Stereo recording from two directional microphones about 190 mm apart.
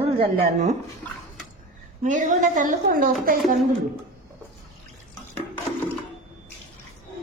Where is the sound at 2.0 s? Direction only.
40° right (ahead or behind).